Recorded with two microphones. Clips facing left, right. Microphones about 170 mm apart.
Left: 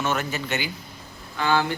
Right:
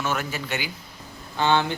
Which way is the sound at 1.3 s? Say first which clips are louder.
Right 1 dB; 25° right (ahead or behind).